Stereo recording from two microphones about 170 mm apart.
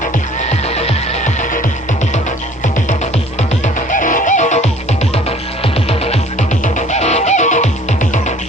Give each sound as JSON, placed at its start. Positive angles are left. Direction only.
{"t": 0.8, "sound": "music", "side_deg": 40}
{"t": 3.8, "sound": "music", "side_deg": 50}